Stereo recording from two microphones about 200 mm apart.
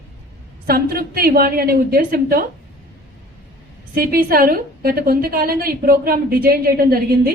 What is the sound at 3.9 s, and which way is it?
A woman's voice, 45° right (ahead or behind).